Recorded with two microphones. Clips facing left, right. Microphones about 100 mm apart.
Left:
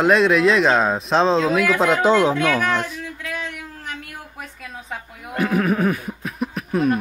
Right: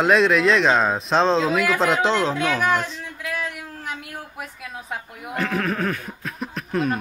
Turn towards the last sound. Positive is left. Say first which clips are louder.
# left 4 dB
turn(degrees=5)  # may be behind; listen again after turning